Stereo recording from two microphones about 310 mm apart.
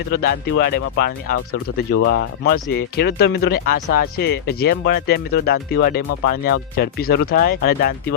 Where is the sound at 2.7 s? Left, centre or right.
Left.